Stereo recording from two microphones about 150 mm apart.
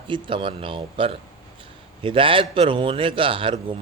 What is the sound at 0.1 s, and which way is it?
A man's voice, 35° right (ahead or behind).